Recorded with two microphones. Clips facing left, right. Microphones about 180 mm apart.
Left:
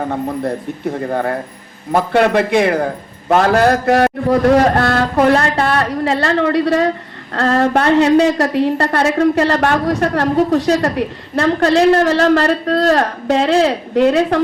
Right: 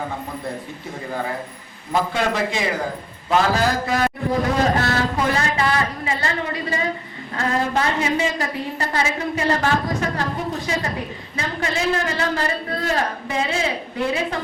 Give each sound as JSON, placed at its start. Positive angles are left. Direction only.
{"t": 0.1, "sound": "a man's voice", "side_deg": 60}